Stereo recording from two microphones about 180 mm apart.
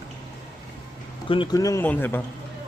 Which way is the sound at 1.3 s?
25° left (ahead or behind).